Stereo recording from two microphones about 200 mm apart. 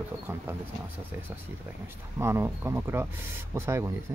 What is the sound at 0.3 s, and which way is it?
Speech, 10° right (ahead or behind).